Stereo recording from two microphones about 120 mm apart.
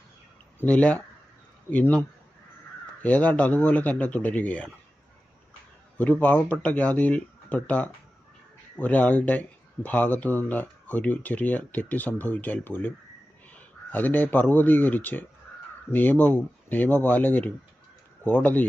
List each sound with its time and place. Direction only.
0.6 s speech: 10° left (ahead or behind)
6.0 s a man's voice: 15° left (ahead or behind)